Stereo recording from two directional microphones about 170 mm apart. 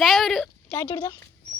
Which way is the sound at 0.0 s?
Centre (ahead or behind).